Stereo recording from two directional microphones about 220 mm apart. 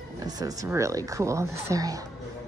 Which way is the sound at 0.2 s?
15° right (ahead or behind).